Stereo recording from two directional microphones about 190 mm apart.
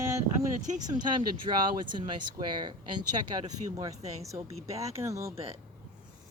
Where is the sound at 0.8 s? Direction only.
20° right (ahead or behind).